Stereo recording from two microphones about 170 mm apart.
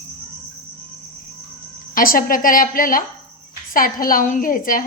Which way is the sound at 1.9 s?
55° left (ahead or behind).